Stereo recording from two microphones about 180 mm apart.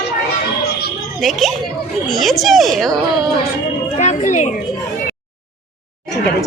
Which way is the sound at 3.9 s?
40° left (ahead or behind).